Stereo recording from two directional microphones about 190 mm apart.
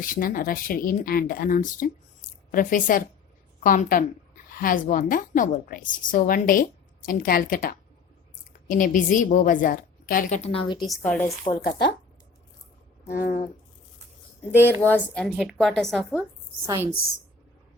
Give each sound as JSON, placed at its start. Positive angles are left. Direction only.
{"t": 0.0, "sound": "a woman's voice", "side_deg": 45}
{"t": 10.8, "sound": "a woman's voice", "side_deg": 5}
{"t": 11.4, "sound": "a woman's voice", "side_deg": 50}
{"t": 13.1, "sound": "a woman's voice", "side_deg": 50}
{"t": 14.7, "sound": "a woman's voice", "side_deg": 10}
{"t": 16.6, "sound": "a woman's voice", "side_deg": -15}